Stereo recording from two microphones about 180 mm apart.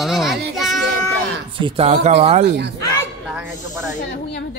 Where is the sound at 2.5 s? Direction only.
70° right (ahead or behind).